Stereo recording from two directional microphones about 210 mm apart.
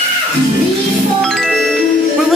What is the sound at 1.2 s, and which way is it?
Music, centre (ahead or behind).